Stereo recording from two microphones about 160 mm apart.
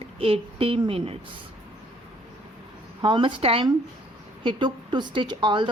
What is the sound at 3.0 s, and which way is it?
A woman's voice, 30° right (ahead or behind).